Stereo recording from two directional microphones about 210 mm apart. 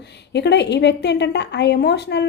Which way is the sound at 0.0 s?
55° left (ahead or behind).